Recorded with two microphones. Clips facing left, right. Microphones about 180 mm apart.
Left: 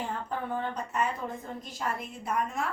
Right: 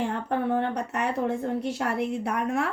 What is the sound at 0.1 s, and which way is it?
A woman's voice, 75° right (ahead or behind).